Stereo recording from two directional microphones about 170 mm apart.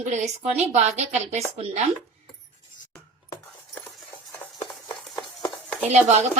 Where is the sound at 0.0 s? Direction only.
45° right (ahead or behind).